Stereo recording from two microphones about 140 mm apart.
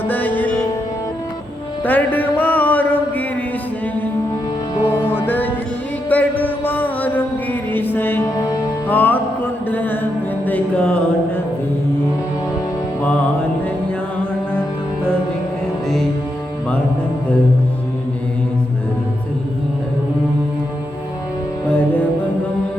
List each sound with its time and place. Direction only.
0.1 s music: 10° left (ahead or behind)
1.8 s music: 10° left (ahead or behind)
4.8 s music: 15° left (ahead or behind)
8.9 s music: 10° left (ahead or behind)
13.0 s music: 10° left (ahead or behind)